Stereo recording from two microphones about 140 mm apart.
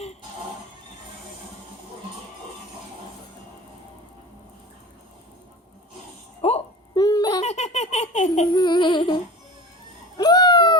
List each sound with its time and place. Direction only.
6.4 s music: 50° left (ahead or behind)
6.9 s baby laughter: 30° left (ahead or behind)
7.4 s baby laughter: 50° left (ahead or behind)
8.5 s music: 35° left (ahead or behind)
10.2 s a sound: 30° left (ahead or behind)